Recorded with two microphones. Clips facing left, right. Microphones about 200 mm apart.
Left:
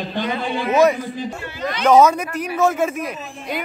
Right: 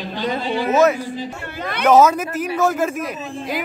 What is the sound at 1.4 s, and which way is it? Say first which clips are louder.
Speech: left 1 dB; 60° right (ahead or behind).